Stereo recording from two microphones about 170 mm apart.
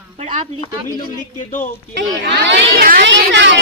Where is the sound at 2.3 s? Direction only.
90° right.